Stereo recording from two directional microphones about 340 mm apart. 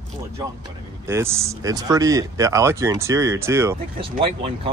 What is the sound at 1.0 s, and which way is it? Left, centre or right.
Speech, centre.